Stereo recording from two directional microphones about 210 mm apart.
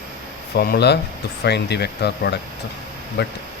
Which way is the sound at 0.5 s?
45° left (ahead or behind).